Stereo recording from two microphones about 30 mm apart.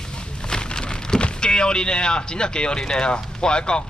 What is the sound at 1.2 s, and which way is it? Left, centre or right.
Speech, left.